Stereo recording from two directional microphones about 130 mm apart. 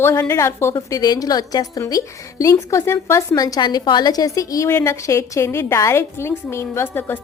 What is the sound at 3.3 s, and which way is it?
A woman's voice, 30° left (ahead or behind).